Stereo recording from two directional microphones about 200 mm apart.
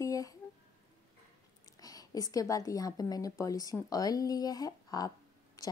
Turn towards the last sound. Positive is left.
turn(degrees=15)  # may be behind; listen again after turning